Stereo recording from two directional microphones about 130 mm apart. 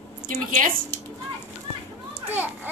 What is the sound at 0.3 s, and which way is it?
Speech, 90° right.